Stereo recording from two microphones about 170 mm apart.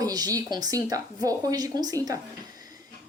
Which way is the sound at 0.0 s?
20° right (ahead or behind).